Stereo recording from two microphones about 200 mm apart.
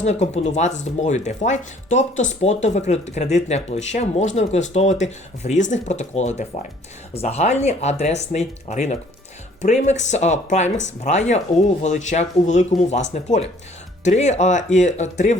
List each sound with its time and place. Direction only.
0.0 s speech: 35° left (ahead or behind)